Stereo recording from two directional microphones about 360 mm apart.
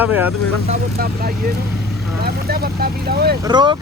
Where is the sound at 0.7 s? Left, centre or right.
Right.